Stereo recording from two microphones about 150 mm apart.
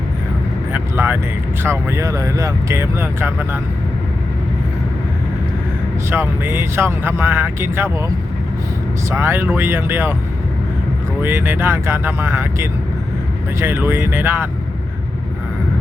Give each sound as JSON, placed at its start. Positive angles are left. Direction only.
{"t": 0.7, "sound": "vehicle", "side_deg": -15}
{"t": 1.6, "sound": "speech", "side_deg": -15}
{"t": 6.1, "sound": "speech", "side_deg": -15}
{"t": 9.0, "sound": "speech", "side_deg": -15}
{"t": 11.2, "sound": "speech", "side_deg": -15}